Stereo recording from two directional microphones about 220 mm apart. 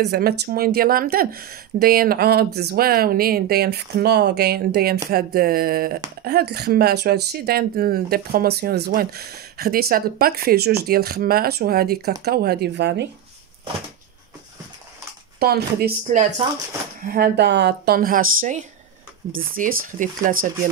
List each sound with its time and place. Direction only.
0.0 s speech: 45° right (ahead or behind)
15.3 s speech: 45° right (ahead or behind)